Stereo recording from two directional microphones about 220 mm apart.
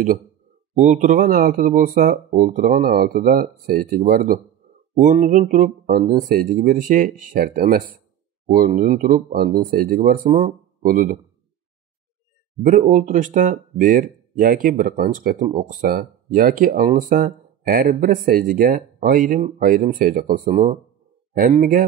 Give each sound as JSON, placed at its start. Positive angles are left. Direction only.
{"t": 0.7, "sound": "a man's voice", "side_deg": -35}
{"t": 12.6, "sound": "speech", "side_deg": -35}
{"t": 20.4, "sound": "speech", "side_deg": -25}